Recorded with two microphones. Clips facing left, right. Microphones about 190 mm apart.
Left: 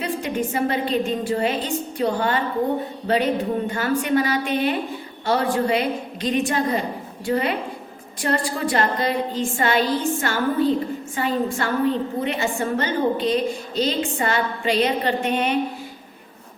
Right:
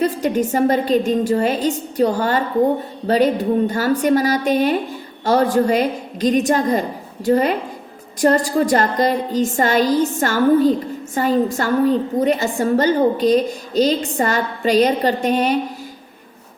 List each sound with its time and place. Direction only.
0.0 s a woman's voice: 40° right (ahead or behind)